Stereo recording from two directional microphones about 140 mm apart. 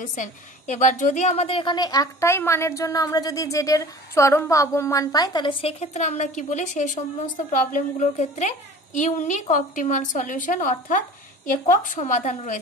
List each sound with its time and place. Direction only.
0.0 s a woman's voice: 65° left (ahead or behind)
1.3 s a woman's voice: 40° left (ahead or behind); by 12.5 s 60° left (ahead or behind)